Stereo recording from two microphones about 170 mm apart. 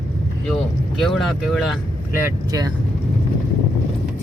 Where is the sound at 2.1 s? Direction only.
15° right (ahead or behind).